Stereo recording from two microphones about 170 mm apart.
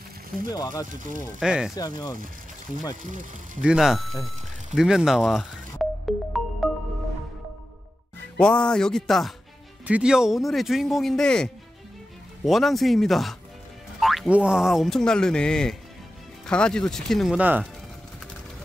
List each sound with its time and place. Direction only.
0.5 s speech: 20° left (ahead or behind)
0.8 s speech: 50° right (ahead or behind)
1.4 s speech: 5° right (ahead or behind)
3.0 s speech: 50° right (ahead or behind)
3.6 s speech: 5° right (ahead or behind)
4.7 s music: 5° right (ahead or behind)
8.4 s speech: 5° left (ahead or behind)